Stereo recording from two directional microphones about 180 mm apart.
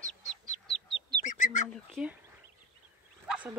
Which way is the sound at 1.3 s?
45° left (ahead or behind).